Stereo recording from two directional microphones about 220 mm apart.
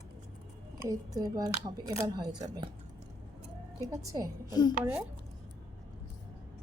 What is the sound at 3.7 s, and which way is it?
Speech, 15° right (ahead or behind).